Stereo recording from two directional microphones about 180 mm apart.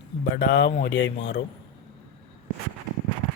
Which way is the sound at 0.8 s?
90° left.